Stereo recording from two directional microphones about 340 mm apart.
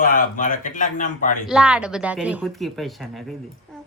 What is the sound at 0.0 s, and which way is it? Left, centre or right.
A man's voice, left.